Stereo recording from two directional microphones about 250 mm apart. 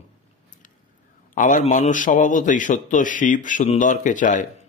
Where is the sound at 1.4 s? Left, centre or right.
Left.